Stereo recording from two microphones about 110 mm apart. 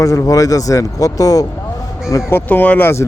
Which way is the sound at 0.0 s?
30° left (ahead or behind).